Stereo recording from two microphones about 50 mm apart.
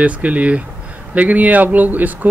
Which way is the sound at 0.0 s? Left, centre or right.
Right.